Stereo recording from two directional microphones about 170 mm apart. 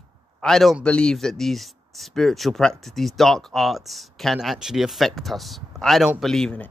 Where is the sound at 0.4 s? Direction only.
Centre (ahead or behind).